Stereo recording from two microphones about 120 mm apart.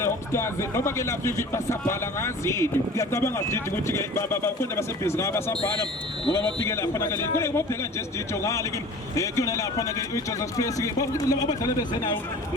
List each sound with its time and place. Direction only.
0.0 s speech: 20° left (ahead or behind)
7.3 s speech: 20° left (ahead or behind)
9.1 s speech: 25° left (ahead or behind)